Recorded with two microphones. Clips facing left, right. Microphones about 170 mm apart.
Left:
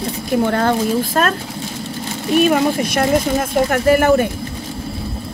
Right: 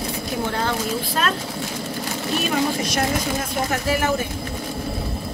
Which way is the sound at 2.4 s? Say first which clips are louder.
Left 7 dB; 55° left (ahead or behind).